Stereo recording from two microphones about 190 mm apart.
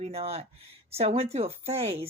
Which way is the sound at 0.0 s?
30° right (ahead or behind).